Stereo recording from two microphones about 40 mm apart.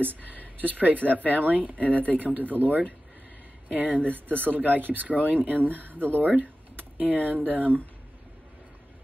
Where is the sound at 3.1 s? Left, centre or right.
Right.